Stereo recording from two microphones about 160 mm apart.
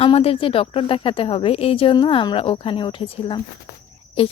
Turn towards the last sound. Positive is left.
turn(degrees=35)  # may be behind; listen again after turning